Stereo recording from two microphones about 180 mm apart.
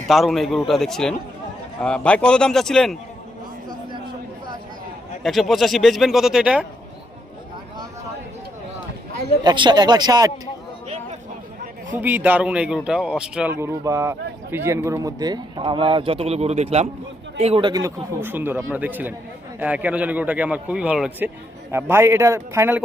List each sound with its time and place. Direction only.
0.1 s a man's voice: centre (ahead or behind)
5.2 s a man's voice: centre (ahead or behind)
9.4 s a man's voice: 25° right (ahead or behind)
11.9 s speech: 10° right (ahead or behind); by 17.7 s 35° right (ahead or behind)
17.7 s speech: 20° right (ahead or behind)